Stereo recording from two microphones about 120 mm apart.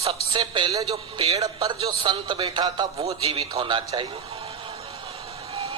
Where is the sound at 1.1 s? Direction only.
55° right (ahead or behind).